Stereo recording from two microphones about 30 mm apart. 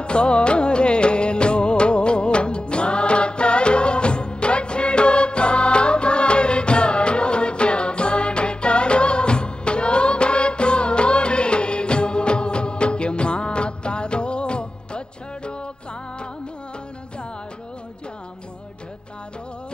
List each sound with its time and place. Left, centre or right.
0.0 s music: left